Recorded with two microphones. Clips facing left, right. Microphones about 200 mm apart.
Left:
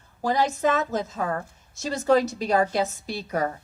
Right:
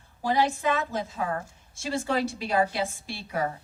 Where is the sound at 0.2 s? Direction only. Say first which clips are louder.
Left 2 dB; 40° left (ahead or behind).